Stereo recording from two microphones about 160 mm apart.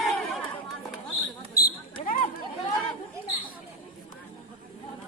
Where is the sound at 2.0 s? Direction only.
60° left (ahead or behind).